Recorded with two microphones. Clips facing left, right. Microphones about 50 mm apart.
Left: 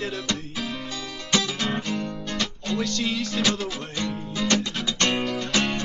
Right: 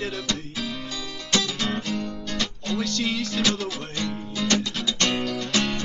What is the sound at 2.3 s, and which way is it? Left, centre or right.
Music, centre.